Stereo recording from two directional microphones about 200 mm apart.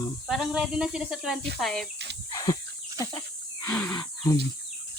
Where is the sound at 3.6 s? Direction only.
10° left (ahead or behind).